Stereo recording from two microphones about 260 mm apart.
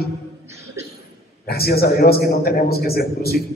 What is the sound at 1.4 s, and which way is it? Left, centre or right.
A man's voice, left.